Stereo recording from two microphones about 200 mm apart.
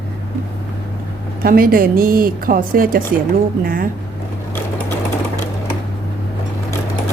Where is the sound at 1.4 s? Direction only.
45° right (ahead or behind).